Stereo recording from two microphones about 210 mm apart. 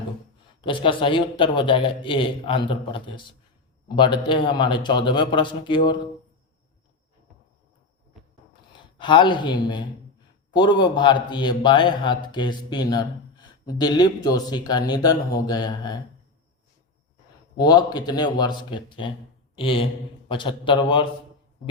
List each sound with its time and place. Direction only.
0.6 s a man's voice: 25° left (ahead or behind)
9.0 s a man's voice: 20° left (ahead or behind)
17.6 s a man's voice: 20° left (ahead or behind)